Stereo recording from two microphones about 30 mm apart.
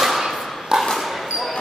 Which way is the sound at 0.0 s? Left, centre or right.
Centre.